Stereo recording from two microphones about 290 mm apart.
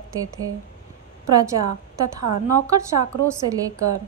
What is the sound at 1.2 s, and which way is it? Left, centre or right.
Speech, right.